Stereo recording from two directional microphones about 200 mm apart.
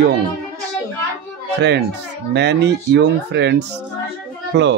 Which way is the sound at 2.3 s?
60° right (ahead or behind).